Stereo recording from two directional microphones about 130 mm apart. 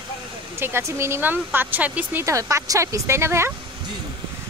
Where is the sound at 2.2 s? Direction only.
25° right (ahead or behind).